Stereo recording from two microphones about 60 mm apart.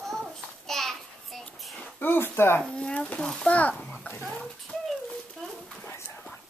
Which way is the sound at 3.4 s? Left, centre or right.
Left.